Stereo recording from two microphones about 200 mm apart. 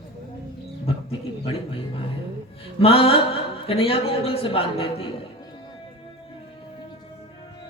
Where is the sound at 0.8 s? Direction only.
30° left (ahead or behind).